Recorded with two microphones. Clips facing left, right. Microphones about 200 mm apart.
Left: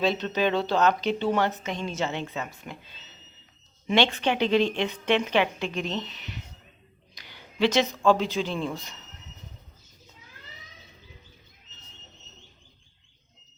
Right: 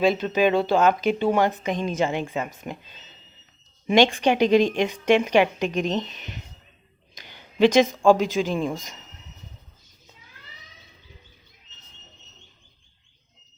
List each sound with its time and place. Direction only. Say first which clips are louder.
0.0 s speech: right 5 dB; 10° right (ahead or behind)
6.1 s speech: right 1 dB; 45° right (ahead or behind)
7.2 s a sound: right 6 dB; 20° right (ahead or behind)
8.4 s speech: right 5 dB; 15° right (ahead or behind)